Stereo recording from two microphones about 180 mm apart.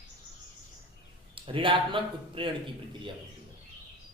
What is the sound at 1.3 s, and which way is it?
Speech, 30° right (ahead or behind).